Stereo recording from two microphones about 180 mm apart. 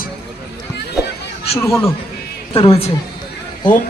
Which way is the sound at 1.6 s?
15° left (ahead or behind).